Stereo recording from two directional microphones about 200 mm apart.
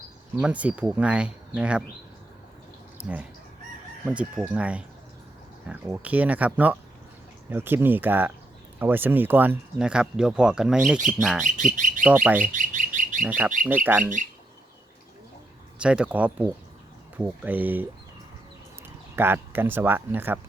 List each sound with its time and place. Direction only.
0.3 s speech: 5° right (ahead or behind)
3.0 s speech: 5° right (ahead or behind)
11.4 s speech: 40° right (ahead or behind)
12.0 s speech: 5° right (ahead or behind)
12.5 s bird: 40° right (ahead or behind)
13.2 s speech: 10° right (ahead or behind)
15.8 s speech: 5° right (ahead or behind)
19.1 s speech: 10° right (ahead or behind)